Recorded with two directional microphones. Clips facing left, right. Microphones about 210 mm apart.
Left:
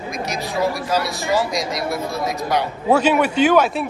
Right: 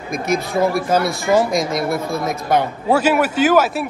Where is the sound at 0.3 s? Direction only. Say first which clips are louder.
Right 5 dB; 55° right (ahead or behind).